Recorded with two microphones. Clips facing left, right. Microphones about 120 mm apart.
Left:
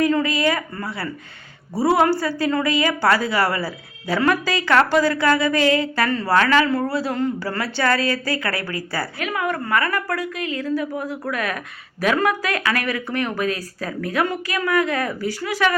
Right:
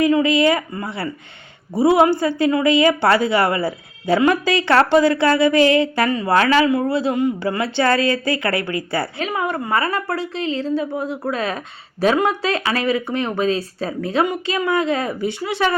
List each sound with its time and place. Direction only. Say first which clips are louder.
0.0 s speech: right 4 dB; 20° right (ahead or behind)